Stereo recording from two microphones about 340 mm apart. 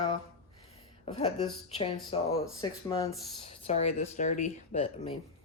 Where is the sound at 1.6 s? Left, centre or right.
Centre.